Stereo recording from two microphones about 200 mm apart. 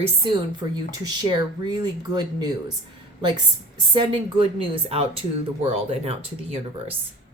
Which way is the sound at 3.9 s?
25° right (ahead or behind).